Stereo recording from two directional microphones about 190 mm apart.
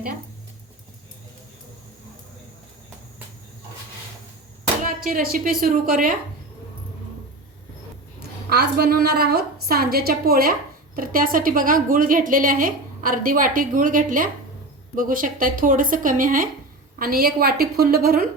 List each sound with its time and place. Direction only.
4.8 s a woman's voice: 45° right (ahead or behind)
8.2 s a woman's voice: 55° right (ahead or behind)